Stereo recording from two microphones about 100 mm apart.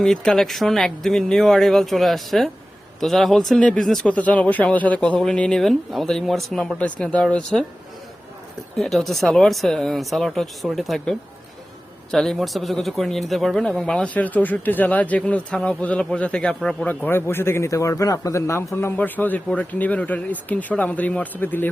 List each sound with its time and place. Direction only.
0.0 s speech: 5° left (ahead or behind)
8.7 s speech: centre (ahead or behind)
16.8 s a man's voice: 20° left (ahead or behind)